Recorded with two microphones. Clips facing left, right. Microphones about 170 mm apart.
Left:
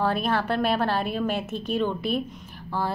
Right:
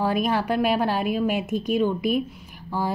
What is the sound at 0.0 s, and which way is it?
A woman's voice, 10° right (ahead or behind).